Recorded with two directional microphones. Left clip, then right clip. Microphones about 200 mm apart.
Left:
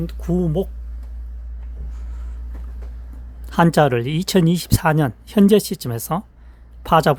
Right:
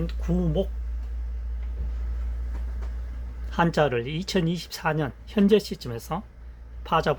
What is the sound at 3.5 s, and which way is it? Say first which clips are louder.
Speech: left 7 dB; 65° left (ahead or behind).